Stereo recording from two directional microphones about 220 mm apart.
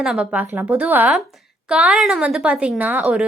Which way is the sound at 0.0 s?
5° right (ahead or behind).